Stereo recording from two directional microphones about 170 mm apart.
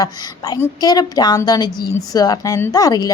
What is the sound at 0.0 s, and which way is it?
A woman's voice, 20° left (ahead or behind).